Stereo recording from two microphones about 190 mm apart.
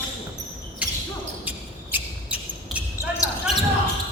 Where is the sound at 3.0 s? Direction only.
15° left (ahead or behind).